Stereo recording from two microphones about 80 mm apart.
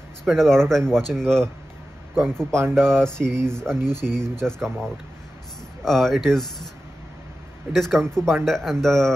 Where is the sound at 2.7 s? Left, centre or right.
Right.